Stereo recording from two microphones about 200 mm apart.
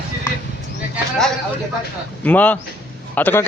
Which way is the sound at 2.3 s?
10° left (ahead or behind).